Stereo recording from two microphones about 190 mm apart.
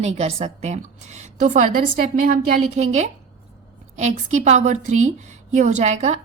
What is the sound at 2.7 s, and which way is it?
A woman's voice, 35° right (ahead or behind).